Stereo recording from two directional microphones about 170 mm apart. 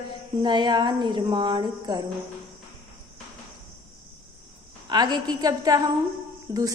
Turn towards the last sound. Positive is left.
turn(degrees=-20)  # may be behind; listen again after turning